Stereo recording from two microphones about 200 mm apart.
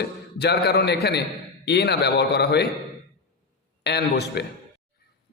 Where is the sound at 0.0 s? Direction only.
55° left (ahead or behind).